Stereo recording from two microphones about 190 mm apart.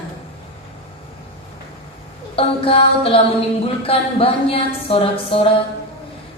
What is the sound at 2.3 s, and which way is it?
Speech, 30° left (ahead or behind).